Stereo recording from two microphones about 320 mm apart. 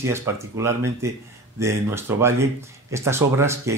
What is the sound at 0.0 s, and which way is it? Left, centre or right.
A man's voice, centre.